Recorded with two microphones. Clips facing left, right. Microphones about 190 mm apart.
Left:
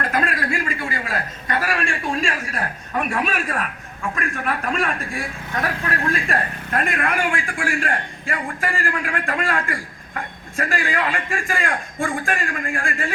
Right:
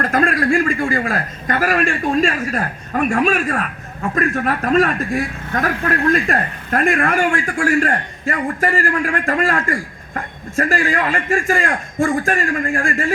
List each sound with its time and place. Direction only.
0.0 s a man's voice: 45° right (ahead or behind)